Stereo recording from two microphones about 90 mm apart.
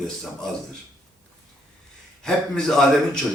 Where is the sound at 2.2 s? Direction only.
5° left (ahead or behind).